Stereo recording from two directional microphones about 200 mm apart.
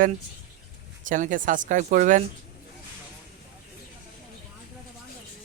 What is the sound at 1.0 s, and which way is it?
Speech, 40° right (ahead or behind).